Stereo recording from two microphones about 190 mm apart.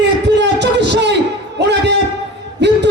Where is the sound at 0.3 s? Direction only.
65° right (ahead or behind).